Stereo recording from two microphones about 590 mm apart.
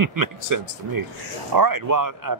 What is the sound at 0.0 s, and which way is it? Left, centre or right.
Speech, right.